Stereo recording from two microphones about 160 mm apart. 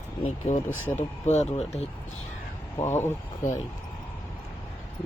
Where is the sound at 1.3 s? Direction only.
45° left (ahead or behind).